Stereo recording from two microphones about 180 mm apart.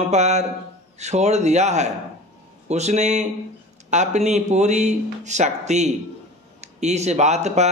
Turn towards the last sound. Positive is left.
turn(degrees=-40)  # may be behind; listen again after turning